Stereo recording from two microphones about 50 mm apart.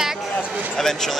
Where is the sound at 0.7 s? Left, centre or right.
Centre.